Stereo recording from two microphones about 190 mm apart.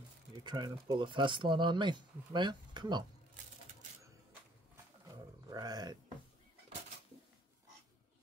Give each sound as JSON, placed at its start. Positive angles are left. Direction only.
{"t": 0.4, "sound": "speech", "side_deg": -25}
{"t": 5.5, "sound": "speech", "side_deg": -20}